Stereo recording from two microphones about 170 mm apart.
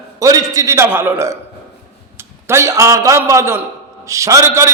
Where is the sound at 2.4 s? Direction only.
15° right (ahead or behind).